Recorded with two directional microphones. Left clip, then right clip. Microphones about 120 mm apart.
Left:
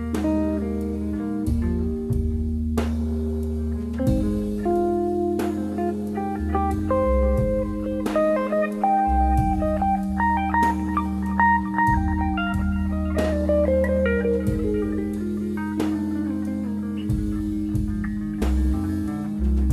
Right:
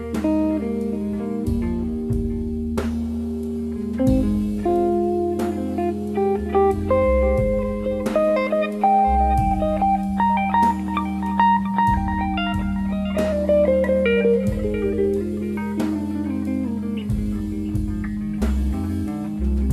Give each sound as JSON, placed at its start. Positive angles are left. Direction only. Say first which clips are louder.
{"t": 0.3, "sound": "music", "louder": "right 4 dB", "side_deg": -30}
{"t": 6.5, "sound": "music", "louder": "right 4 dB", "side_deg": -30}
{"t": 13.6, "sound": "music", "louder": "right 3 dB", "side_deg": -40}